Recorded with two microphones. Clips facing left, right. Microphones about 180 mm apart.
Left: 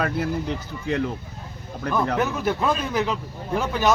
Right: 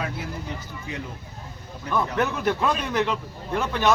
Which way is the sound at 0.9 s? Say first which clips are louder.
Left 11 dB; 90° left.